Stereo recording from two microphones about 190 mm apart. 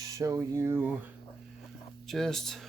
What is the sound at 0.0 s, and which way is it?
Speech, 15° right (ahead or behind).